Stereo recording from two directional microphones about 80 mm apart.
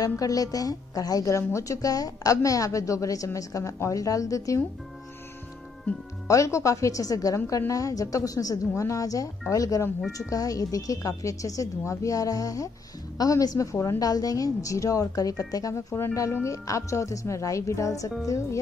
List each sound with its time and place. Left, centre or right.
0.0 s a woman's voice: left
6.2 s a woman's voice: left